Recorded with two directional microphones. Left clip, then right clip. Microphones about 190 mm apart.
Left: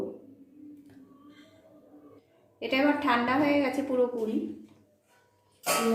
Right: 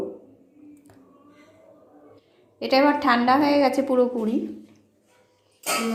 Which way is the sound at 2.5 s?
30° right (ahead or behind).